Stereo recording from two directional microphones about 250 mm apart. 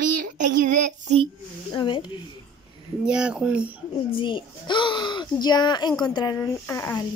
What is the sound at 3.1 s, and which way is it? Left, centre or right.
Speech, centre.